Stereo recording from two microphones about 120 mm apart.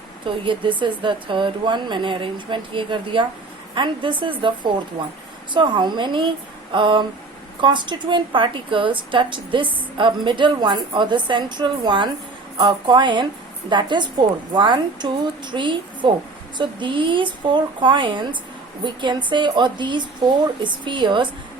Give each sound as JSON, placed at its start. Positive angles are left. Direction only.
{"t": 0.3, "sound": "a woman's voice", "side_deg": -45}